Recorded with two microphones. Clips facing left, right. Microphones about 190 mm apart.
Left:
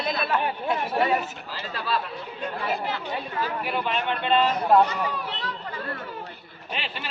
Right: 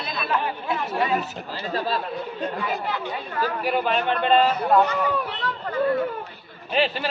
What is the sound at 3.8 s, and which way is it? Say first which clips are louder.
Speech: right 4 dB; 45° right (ahead or behind).